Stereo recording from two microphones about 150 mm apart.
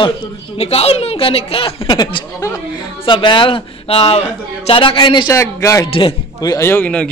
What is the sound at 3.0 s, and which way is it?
Speech, 35° left (ahead or behind).